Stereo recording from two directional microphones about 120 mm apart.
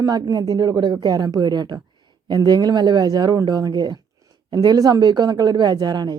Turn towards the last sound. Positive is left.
turn(degrees=-35)  # may be behind; listen again after turning